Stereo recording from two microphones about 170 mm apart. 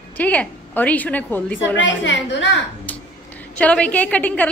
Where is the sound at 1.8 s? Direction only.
90° left.